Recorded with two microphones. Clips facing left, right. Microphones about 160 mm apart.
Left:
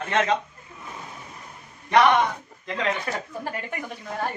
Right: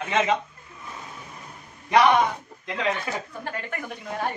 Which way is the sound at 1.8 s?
10° right (ahead or behind).